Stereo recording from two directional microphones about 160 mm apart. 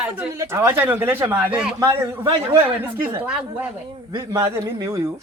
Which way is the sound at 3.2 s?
5° right (ahead or behind).